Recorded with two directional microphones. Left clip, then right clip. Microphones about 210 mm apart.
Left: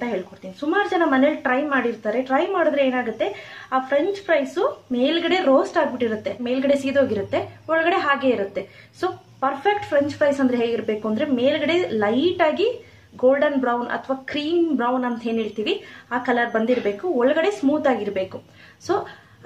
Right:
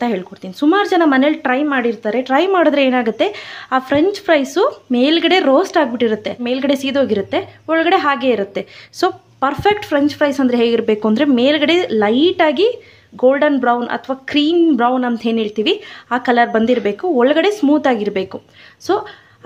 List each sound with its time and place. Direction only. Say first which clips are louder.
0.0 s speech: right 7 dB; 50° right (ahead or behind)
9.0 s speech: right 7 dB; 55° right (ahead or behind)